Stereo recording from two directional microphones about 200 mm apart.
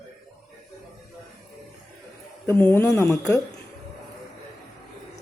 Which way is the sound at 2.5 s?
10° left (ahead or behind).